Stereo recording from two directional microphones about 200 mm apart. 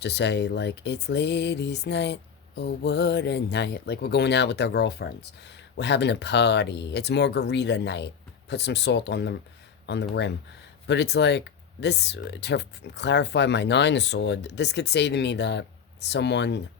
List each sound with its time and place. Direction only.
0.0 s speech: 60° left (ahead or behind)